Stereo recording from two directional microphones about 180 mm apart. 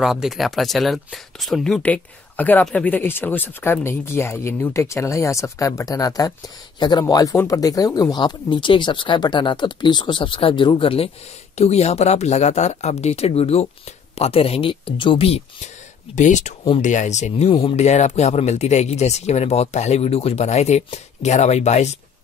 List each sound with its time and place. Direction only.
0.0 s speech: centre (ahead or behind); by 21.9 s 40° left (ahead or behind)